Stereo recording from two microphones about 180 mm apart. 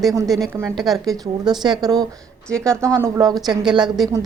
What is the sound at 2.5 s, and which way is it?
Speech, 5° left (ahead or behind).